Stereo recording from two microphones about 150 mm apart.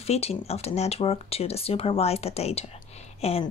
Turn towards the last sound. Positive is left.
turn(degrees=45)  # may be behind; listen again after turning